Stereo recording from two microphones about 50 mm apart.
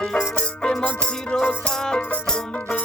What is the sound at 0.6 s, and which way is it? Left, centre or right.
Music, centre.